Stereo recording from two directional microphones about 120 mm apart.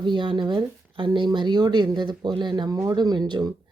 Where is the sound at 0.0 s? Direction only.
40° right (ahead or behind).